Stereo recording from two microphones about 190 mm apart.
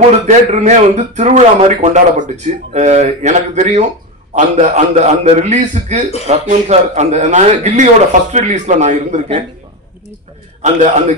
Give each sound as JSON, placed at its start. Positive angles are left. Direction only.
{"t": 0.3, "sound": "speech", "side_deg": -40}
{"t": 10.6, "sound": "speech", "side_deg": -40}